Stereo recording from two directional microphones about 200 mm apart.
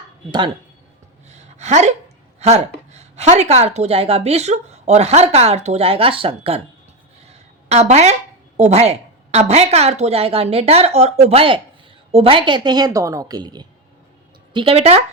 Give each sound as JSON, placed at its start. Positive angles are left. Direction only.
{"t": 0.3, "sound": "a woman's voice", "side_deg": -25}
{"t": 1.3, "sound": "a sound", "side_deg": -35}
{"t": 2.4, "sound": "a woman's voice", "side_deg": -35}
{"t": 7.7, "sound": "a woman's voice", "side_deg": -35}